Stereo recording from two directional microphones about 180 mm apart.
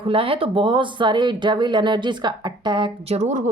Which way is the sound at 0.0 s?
30° right (ahead or behind).